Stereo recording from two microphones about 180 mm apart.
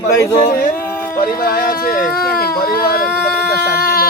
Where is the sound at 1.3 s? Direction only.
55° left (ahead or behind).